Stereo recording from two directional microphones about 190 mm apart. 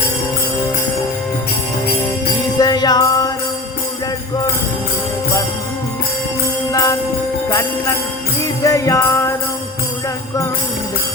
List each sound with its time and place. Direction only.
2.6 s jingle bell: 20° left (ahead or behind)
6.7 s jingle bell: 20° left (ahead or behind)
8.4 s jingle bell: 15° left (ahead or behind)